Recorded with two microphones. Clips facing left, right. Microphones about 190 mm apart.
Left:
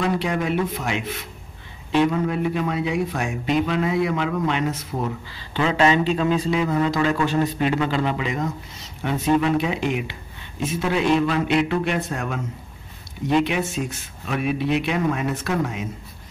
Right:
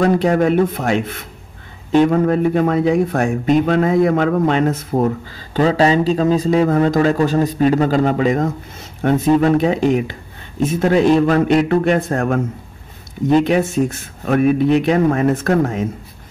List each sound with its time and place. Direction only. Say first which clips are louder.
0.0 s speech: right 9 dB; 45° right (ahead or behind)